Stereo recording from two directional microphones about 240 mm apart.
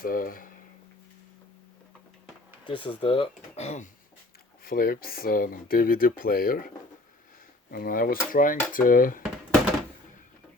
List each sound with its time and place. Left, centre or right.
0.0 s speech: left
2.6 s speech: left
4.6 s speech: left
7.7 s speech: left